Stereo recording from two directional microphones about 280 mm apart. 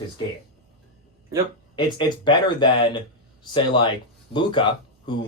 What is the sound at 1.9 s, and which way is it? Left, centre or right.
Speech, centre.